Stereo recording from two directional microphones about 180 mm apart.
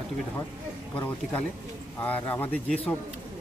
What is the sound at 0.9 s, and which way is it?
Speech, 10° left (ahead or behind).